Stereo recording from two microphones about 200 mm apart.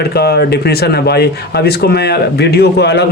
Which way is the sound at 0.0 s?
50° left (ahead or behind).